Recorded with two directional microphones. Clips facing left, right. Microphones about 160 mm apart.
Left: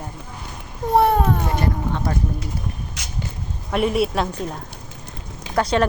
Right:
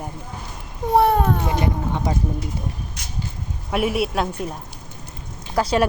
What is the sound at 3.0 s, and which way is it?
Vehicle, 90° left.